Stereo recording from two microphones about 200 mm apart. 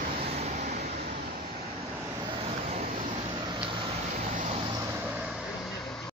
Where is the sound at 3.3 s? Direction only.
25° right (ahead or behind).